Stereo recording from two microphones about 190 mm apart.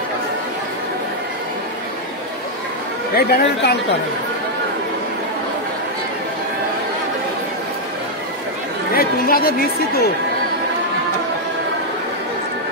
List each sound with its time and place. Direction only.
3.2 s speech: 55° left (ahead or behind)
8.9 s a woman's voice: 50° left (ahead or behind)